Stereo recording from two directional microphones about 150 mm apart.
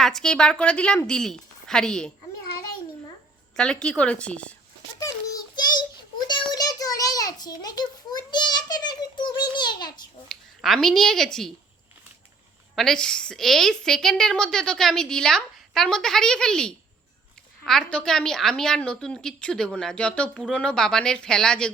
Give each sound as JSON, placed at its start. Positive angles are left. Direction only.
{"t": 0.0, "sound": "a woman's voice", "side_deg": 5}
{"t": 3.5, "sound": "a woman's voice", "side_deg": 5}
{"t": 6.1, "sound": "a sound", "side_deg": 30}
{"t": 10.2, "sound": "speech", "side_deg": 0}
{"t": 12.7, "sound": "a woman's voice", "side_deg": 5}